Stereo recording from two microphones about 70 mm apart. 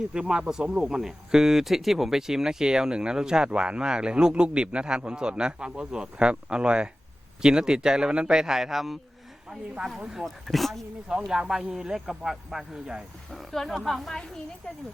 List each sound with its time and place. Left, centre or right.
0.1 s speech: centre